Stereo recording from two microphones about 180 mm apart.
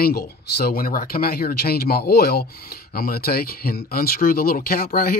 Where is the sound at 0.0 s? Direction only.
60° left (ahead or behind).